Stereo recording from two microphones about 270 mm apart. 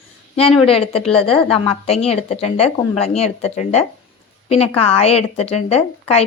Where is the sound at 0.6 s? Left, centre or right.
Left.